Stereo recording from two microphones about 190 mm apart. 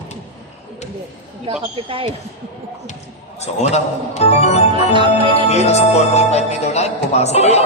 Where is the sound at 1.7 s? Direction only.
30° right (ahead or behind).